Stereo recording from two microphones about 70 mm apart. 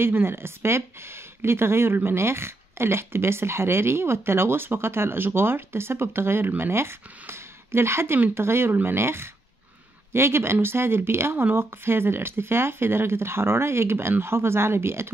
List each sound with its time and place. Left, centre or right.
0.0 s speech: right